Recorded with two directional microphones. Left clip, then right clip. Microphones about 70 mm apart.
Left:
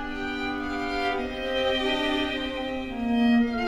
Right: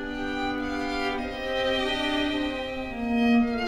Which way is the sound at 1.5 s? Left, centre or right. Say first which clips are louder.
Left 1 dB; right.